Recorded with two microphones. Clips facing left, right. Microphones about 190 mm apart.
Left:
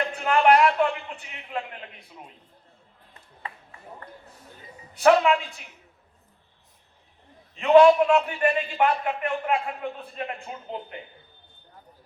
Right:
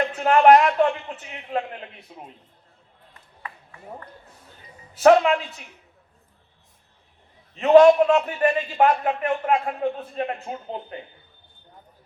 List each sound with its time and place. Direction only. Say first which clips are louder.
0.3 s a sound: right 4 dB; 40° right (ahead or behind)
1.5 s a man's voice: right 5 dB; 35° right (ahead or behind)
4.9 s a man's voice: right 3 dB; 35° right (ahead or behind)
7.5 s a man's voice: right 2 dB; 40° right (ahead or behind)